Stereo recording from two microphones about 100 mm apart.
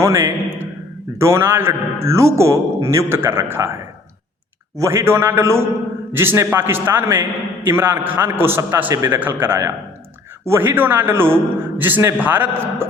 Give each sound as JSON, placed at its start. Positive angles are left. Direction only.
{"t": 0.0, "sound": "a man's voice", "side_deg": -25}
{"t": 4.8, "sound": "a man's voice", "side_deg": -25}